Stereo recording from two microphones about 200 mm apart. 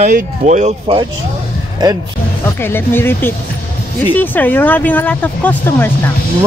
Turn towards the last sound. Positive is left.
turn(degrees=10)  # may be behind; listen again after turning